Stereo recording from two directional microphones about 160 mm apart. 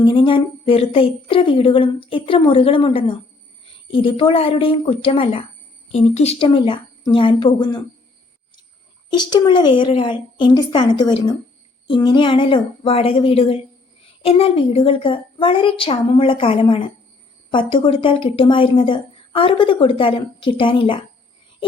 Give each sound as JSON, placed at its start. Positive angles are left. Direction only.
{"t": 0.0, "sound": "a woman's voice", "side_deg": 30}
{"t": 9.0, "sound": "a woman's voice", "side_deg": 25}